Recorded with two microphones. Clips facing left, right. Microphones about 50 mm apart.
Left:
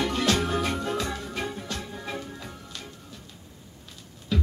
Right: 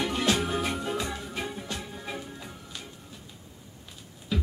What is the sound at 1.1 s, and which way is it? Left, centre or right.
Music, left.